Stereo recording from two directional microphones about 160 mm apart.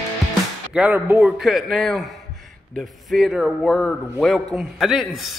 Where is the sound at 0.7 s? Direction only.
10° right (ahead or behind).